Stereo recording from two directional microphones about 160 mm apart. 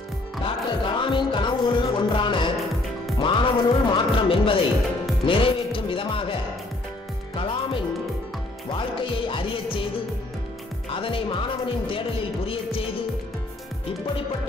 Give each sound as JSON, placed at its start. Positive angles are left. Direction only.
{"t": 0.4, "sound": "music", "side_deg": 30}
{"t": 3.2, "sound": "speech", "side_deg": 30}
{"t": 5.2, "sound": "music", "side_deg": 35}
{"t": 7.3, "sound": "music", "side_deg": 30}
{"t": 8.7, "sound": "speech", "side_deg": 30}
{"t": 10.9, "sound": "speech", "side_deg": 35}